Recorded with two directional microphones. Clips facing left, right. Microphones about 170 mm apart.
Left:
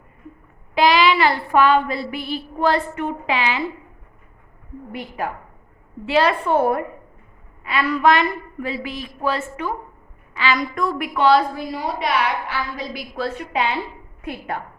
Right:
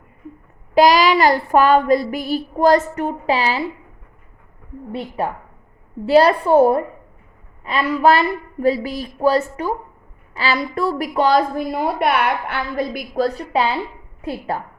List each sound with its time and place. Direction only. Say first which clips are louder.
0.7 s child singing: right 3 dB; 40° right (ahead or behind)
4.9 s a woman's voice: right 4 dB; 30° right (ahead or behind)
6.1 s child singing: right 5 dB; 40° right (ahead or behind)
10.3 s a woman's voice: right 1 dB; 35° right (ahead or behind)